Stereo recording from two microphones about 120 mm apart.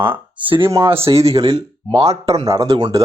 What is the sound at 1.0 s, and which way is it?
Speech, 55° right (ahead or behind).